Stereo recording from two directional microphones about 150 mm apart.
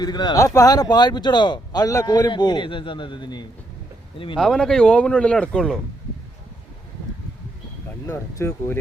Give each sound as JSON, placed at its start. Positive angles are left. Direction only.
{"t": 0.0, "sound": "speech", "side_deg": 30}
{"t": 4.4, "sound": "speech", "side_deg": 5}
{"t": 8.0, "sound": "speech", "side_deg": 15}